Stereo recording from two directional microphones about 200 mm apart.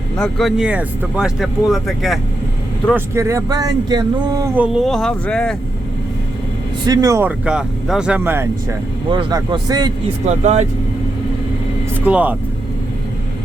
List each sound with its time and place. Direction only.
0.2 s speech: centre (ahead or behind)
2.9 s speech: 15° right (ahead or behind)
4.5 s speech: 5° right (ahead or behind)
6.8 s speech: 20° right (ahead or behind)
9.0 s speech: 25° right (ahead or behind)
10.2 s speech: 35° right (ahead or behind)
12.0 s speech: 5° right (ahead or behind)